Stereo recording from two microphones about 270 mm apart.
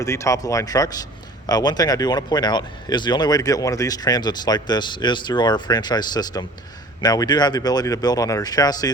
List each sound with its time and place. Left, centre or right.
0.0 s speech: centre